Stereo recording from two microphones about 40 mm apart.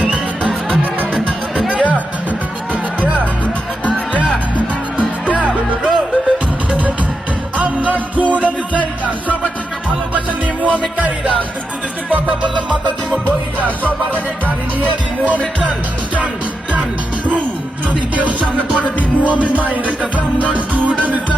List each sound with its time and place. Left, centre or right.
1.7 s music: right
3.9 s music: right
5.3 s music: right
10.2 s music: right
13.7 s music: left
18.1 s music: right